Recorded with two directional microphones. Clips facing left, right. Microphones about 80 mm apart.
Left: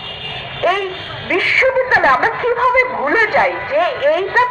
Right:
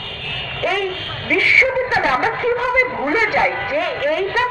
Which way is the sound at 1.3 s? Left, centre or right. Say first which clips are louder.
Left 2 dB; left.